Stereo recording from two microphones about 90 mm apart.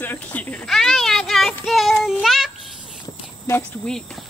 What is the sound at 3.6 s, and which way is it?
Speech, 10° left (ahead or behind).